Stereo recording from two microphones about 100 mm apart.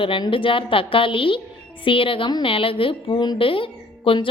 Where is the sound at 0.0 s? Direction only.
60° left (ahead or behind).